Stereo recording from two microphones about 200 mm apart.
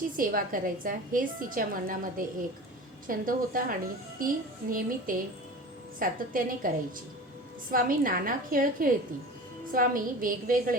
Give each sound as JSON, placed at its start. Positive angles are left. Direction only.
{"t": 0.2, "sound": "a woman's voice", "side_deg": -45}
{"t": 7.7, "sound": "a woman's voice", "side_deg": -45}